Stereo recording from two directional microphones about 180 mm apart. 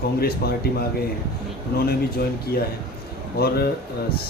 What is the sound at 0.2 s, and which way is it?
Speech, 60° left (ahead or behind).